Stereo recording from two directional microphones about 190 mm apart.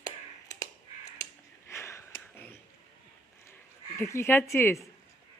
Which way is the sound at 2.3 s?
10° left (ahead or behind).